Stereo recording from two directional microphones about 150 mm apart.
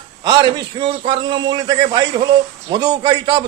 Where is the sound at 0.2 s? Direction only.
30° right (ahead or behind).